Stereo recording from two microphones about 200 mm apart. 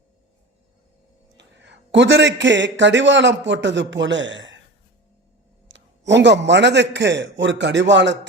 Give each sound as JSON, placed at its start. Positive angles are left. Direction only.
{"t": 1.4, "sound": "a man's voice", "side_deg": -60}
{"t": 5.6, "sound": "a man's voice", "side_deg": -65}